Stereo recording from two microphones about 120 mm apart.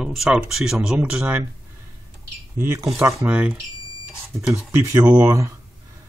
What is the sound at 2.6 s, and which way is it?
Speech, 20° right (ahead or behind).